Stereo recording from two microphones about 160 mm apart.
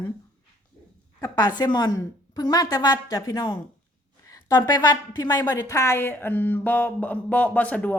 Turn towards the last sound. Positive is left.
turn(degrees=10)  # may be behind; listen again after turning